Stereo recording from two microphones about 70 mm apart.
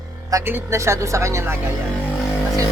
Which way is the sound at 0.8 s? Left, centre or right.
Right.